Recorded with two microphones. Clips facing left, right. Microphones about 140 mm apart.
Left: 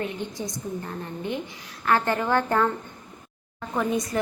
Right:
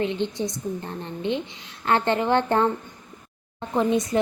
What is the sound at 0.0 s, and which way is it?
Speech, 25° right (ahead or behind).